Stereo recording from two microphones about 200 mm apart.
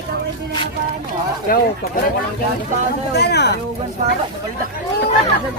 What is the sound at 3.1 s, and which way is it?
Speech, 55° left (ahead or behind).